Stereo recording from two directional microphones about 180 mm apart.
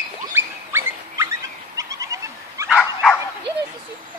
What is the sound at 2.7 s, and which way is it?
Dog, 5° left (ahead or behind).